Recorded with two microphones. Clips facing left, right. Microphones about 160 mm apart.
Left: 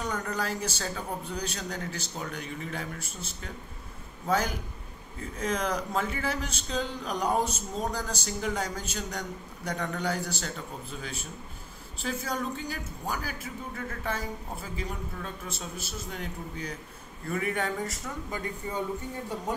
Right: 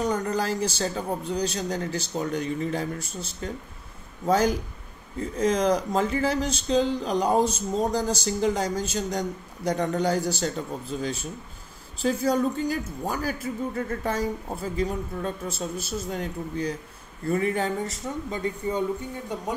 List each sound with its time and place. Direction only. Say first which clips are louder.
0.0 s speech: right 6 dB; 35° right (ahead or behind)